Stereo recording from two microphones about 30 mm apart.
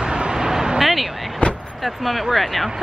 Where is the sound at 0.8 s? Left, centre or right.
Centre.